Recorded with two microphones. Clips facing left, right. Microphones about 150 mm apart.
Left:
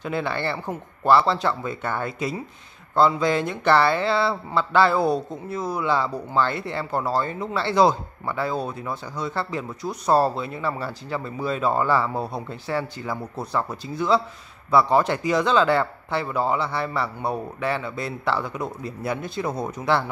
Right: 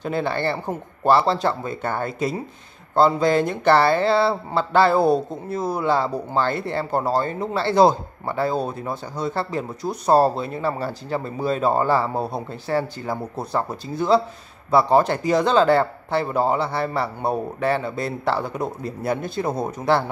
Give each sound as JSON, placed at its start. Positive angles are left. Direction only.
{"t": 0.0, "sound": "speech", "side_deg": -35}
{"t": 12.4, "sound": "speech", "side_deg": -40}